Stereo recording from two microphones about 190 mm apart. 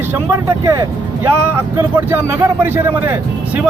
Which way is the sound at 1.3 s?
10° right (ahead or behind).